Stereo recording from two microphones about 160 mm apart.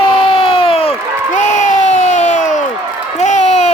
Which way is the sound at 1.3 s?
50° left (ahead or behind).